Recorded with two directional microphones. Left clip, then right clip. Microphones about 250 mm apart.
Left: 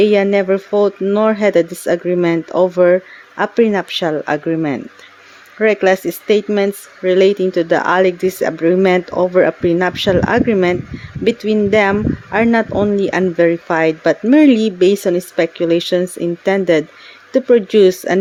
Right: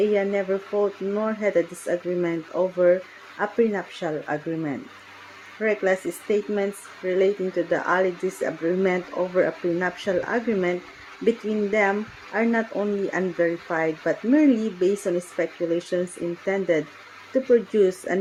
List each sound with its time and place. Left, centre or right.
0.1 s speech: left